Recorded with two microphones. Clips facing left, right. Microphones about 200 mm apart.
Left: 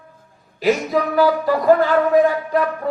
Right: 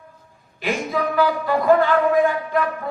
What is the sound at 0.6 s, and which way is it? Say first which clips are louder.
A man's voice: left 5 dB; 35° left (ahead or behind).